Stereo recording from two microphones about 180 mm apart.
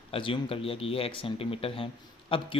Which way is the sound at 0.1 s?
30° left (ahead or behind).